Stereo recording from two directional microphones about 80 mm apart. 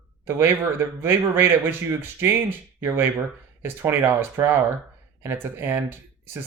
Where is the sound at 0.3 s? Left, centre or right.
Right.